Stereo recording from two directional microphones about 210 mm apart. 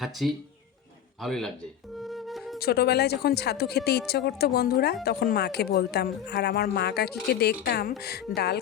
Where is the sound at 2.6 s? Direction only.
50° left (ahead or behind).